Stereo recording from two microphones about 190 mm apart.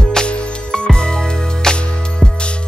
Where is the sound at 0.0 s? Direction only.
5° left (ahead or behind).